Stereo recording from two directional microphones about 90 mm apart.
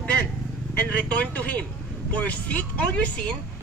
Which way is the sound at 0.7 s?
15° left (ahead or behind).